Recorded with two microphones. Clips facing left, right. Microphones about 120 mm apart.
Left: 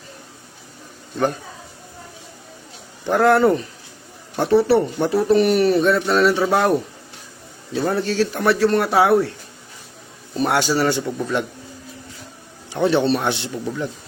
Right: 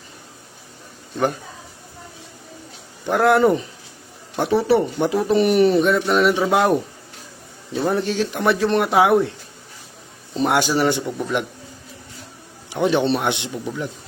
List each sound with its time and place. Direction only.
3.1 s speech: 10° right (ahead or behind)
10.3 s speech: 15° right (ahead or behind)
12.7 s speech: 15° right (ahead or behind)
13.5 s a man's voice: 5° right (ahead or behind)